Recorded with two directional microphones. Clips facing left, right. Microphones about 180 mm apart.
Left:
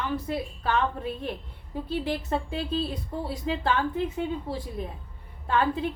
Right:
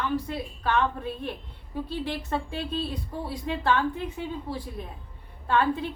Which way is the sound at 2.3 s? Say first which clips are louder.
Left 2 dB; 25° left (ahead or behind).